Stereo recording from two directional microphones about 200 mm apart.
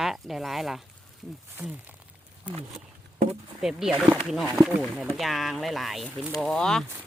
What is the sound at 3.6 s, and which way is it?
Speech, centre (ahead or behind).